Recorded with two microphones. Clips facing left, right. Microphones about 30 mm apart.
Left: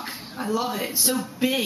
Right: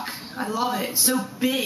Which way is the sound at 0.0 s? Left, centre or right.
Centre.